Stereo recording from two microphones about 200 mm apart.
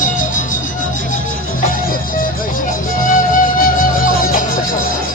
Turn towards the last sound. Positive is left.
turn(degrees=40)  # may be behind; listen again after turning